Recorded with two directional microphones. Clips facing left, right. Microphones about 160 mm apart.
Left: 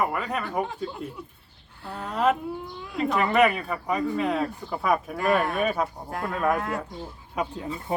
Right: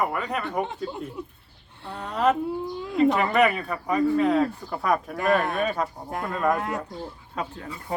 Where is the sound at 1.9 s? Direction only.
5° left (ahead or behind).